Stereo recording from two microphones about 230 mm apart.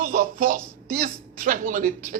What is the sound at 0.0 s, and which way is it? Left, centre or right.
Speech, right.